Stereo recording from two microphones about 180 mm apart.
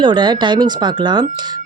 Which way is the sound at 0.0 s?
25° right (ahead or behind).